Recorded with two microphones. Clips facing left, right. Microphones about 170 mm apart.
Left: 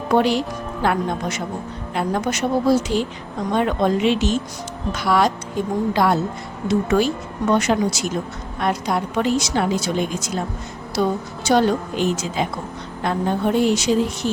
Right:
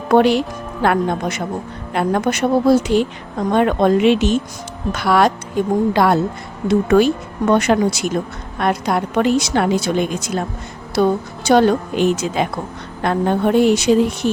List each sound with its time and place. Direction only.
0.1 s a woman's voice: 60° right (ahead or behind)